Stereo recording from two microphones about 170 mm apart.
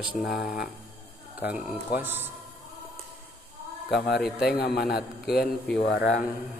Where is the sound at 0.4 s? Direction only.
70° left (ahead or behind).